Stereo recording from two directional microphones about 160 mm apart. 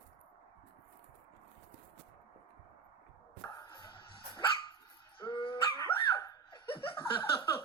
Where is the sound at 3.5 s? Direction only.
25° left (ahead or behind).